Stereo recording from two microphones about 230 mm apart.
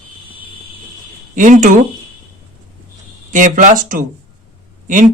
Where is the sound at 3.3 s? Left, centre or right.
Right.